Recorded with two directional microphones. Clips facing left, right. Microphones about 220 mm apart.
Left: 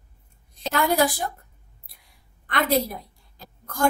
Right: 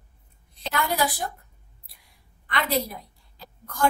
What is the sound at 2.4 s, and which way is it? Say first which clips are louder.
A woman's voice: left 4 dB; 45° left (ahead or behind).